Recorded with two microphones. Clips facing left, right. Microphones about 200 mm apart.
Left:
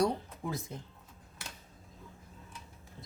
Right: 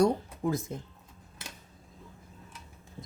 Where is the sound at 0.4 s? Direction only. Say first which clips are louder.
Right 8 dB; 45° right (ahead or behind).